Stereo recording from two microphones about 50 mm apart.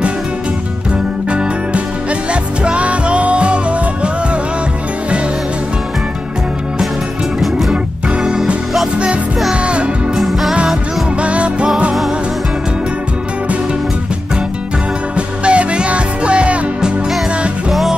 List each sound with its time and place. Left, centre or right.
1.3 s music: right
8.9 s music: right
10.1 s music: centre
11.1 s music: right
15.1 s music: right